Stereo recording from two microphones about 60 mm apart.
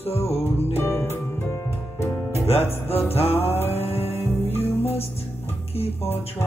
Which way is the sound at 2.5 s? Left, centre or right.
Left.